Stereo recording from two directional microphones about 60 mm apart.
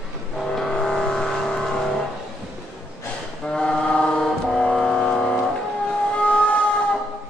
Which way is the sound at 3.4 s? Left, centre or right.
Centre.